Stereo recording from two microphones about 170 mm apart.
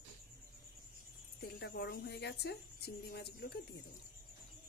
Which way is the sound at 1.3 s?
75° left (ahead or behind).